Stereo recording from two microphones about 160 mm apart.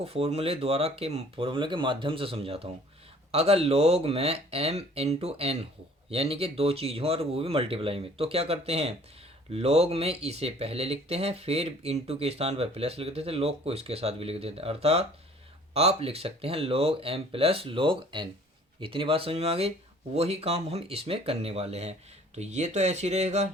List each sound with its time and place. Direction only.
0.0 s speech: 40° right (ahead or behind)